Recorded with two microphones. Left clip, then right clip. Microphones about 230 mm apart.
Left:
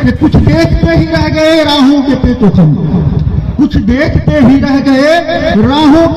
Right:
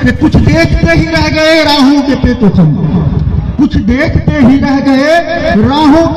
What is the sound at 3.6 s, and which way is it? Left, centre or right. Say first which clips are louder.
A man's voice: even; left.